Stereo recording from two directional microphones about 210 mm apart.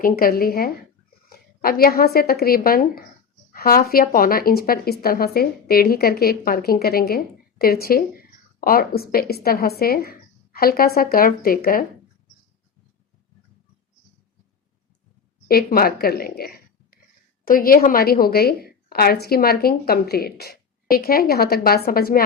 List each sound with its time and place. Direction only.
0.0 s a woman's voice: 45° left (ahead or behind)
15.4 s a woman's voice: 45° left (ahead or behind)